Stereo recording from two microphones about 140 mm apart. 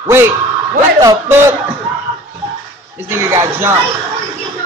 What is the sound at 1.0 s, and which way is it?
Speech, 15° right (ahead or behind).